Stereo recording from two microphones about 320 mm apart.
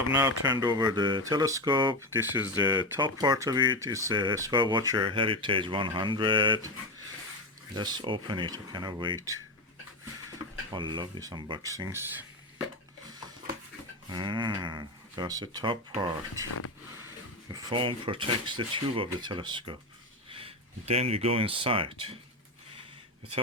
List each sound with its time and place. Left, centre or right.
0.1 s speech: centre
7.8 s speech: centre
10.7 s speech: centre
14.1 s speech: centre
17.5 s speech: centre